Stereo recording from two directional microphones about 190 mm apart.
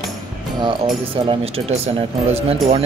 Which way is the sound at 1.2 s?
30° right (ahead or behind).